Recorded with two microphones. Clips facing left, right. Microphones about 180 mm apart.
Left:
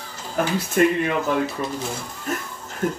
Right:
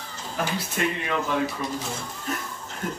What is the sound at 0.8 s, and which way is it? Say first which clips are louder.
Speech: left 10 dB; 50° left (ahead or behind).